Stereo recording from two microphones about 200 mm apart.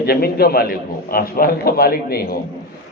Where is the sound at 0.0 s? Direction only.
50° left (ahead or behind).